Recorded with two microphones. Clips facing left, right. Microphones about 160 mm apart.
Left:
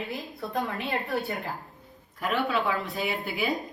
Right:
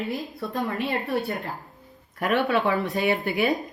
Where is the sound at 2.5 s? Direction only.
70° right (ahead or behind).